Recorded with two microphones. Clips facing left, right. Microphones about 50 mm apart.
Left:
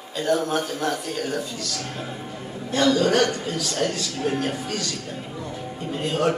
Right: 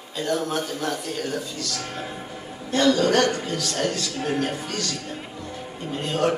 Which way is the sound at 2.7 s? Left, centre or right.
Centre.